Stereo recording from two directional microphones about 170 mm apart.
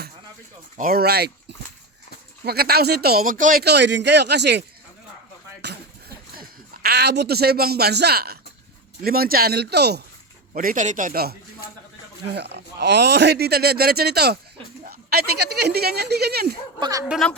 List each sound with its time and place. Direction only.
0.8 s speech: 60° right (ahead or behind)
2.4 s speech: 65° right (ahead or behind); by 4.6 s 85° right
5.6 s a sound: 65° right (ahead or behind)
6.8 s speech: 75° right (ahead or behind)
10.5 s a man's voice: 55° right (ahead or behind)
12.3 s a woman's voice: 85° right; by 16.6 s 65° right (ahead or behind)
17.1 s speech: centre (ahead or behind)